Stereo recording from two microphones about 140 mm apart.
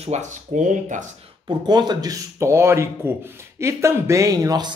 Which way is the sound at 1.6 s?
30° right (ahead or behind).